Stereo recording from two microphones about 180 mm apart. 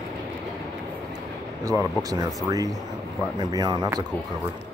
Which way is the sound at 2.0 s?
20° right (ahead or behind).